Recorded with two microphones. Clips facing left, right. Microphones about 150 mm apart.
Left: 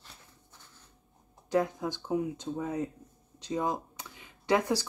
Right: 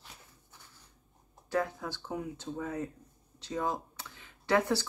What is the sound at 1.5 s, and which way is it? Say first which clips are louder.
Speech: left 4 dB; 20° left (ahead or behind).